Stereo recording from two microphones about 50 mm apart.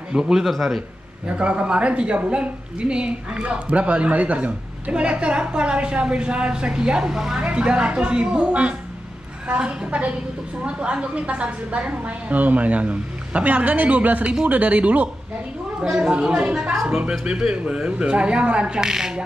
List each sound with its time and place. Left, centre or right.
0.1 s a man's voice: centre
0.5 s speech: centre
1.2 s speech: right
15.8 s speech: centre
18.8 s a sound: centre